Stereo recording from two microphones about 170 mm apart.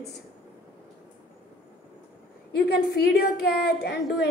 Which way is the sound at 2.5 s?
70° left (ahead or behind).